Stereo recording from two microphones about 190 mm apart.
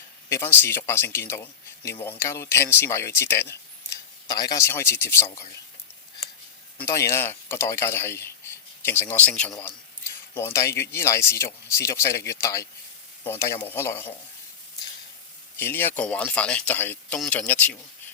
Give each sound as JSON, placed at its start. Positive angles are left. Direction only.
{"t": 0.3, "sound": "speech", "side_deg": 15}
{"t": 6.7, "sound": "speech", "side_deg": 15}
{"t": 15.5, "sound": "speech", "side_deg": 10}